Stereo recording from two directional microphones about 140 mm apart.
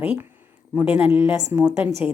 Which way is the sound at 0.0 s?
10° right (ahead or behind).